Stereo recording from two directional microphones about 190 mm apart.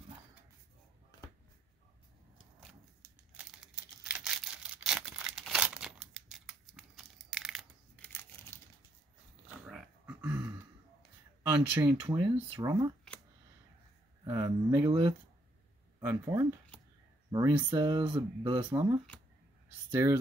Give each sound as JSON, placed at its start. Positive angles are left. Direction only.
{"t": 3.3, "sound": "a sound", "side_deg": -5}
{"t": 8.1, "sound": "crumpling", "side_deg": 10}
{"t": 9.7, "sound": "dog", "side_deg": -5}
{"t": 11.8, "sound": "speech", "side_deg": -25}
{"t": 14.2, "sound": "speech", "side_deg": -20}
{"t": 18.7, "sound": "speech", "side_deg": -15}
{"t": 20.0, "sound": "speech", "side_deg": -15}